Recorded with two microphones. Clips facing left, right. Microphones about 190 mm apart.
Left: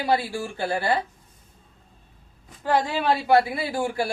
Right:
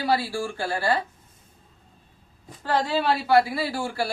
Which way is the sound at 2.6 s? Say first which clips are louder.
Left 1 dB; 15° left (ahead or behind).